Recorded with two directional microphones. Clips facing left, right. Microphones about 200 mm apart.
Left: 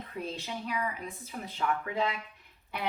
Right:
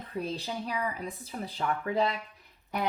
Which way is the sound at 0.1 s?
35° right (ahead or behind).